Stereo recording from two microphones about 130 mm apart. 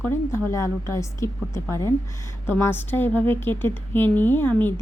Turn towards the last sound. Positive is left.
turn(degrees=15)  # may be behind; listen again after turning